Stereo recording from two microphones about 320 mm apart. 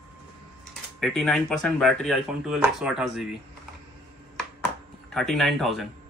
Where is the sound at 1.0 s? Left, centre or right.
Centre.